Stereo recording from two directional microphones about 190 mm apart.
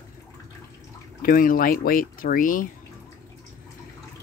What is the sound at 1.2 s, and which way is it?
Speech, 45° left (ahead or behind).